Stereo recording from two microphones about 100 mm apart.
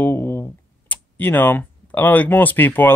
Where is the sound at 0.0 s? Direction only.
20° left (ahead or behind).